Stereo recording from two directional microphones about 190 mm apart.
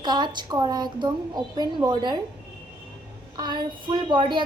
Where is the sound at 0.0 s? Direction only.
25° right (ahead or behind).